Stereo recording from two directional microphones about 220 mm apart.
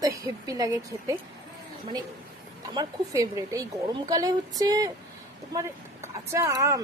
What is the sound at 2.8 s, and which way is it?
Speech, 15° right (ahead or behind).